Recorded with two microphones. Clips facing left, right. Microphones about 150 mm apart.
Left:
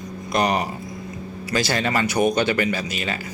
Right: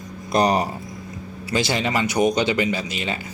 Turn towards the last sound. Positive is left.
turn(degrees=-20)  # may be behind; listen again after turning